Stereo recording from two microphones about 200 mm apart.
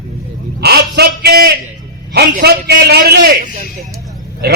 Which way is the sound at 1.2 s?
50° right (ahead or behind).